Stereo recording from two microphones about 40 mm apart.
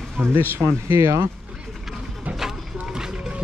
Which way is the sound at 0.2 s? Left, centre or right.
Right.